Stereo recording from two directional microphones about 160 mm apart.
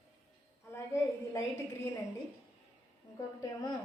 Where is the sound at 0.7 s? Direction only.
15° left (ahead or behind).